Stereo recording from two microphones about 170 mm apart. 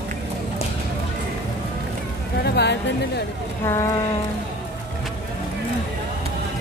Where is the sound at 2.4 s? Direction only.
80° left.